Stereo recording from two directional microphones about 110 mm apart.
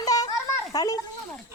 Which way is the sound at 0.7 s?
35° left (ahead or behind).